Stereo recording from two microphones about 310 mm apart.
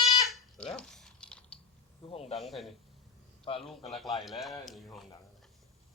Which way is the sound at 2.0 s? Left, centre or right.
Centre.